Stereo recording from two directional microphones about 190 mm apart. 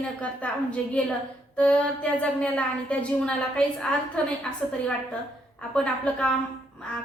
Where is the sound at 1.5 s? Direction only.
5° left (ahead or behind).